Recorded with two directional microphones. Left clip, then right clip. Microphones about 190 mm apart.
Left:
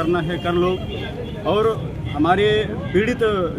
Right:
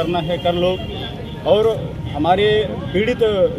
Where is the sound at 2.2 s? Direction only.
10° left (ahead or behind).